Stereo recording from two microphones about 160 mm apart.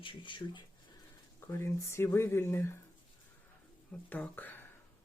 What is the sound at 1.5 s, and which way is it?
Speech, 15° left (ahead or behind).